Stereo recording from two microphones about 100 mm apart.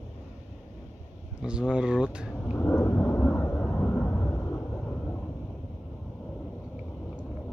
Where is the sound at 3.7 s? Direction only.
15° left (ahead or behind).